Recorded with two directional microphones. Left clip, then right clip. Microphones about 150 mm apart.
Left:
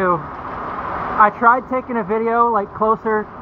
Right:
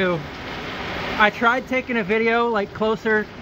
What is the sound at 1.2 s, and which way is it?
Speech, 15° right (ahead or behind).